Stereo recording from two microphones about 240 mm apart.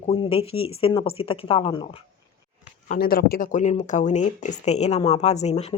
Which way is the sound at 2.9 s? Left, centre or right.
Left.